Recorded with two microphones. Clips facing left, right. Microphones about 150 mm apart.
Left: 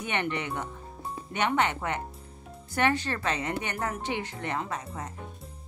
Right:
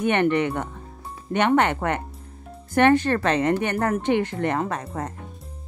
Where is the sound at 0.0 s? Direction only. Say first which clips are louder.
Right 11 dB; 55° right (ahead or behind).